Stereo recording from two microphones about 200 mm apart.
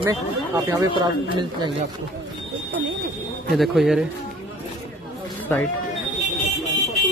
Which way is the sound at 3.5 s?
Centre (ahead or behind).